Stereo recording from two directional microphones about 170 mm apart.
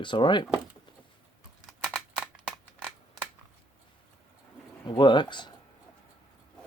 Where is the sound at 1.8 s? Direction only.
Centre (ahead or behind).